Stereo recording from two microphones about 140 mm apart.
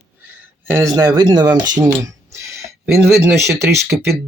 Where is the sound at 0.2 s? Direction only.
15° right (ahead or behind).